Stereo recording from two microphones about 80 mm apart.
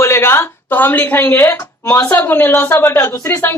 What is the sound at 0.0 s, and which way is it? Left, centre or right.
A woman's voice, left.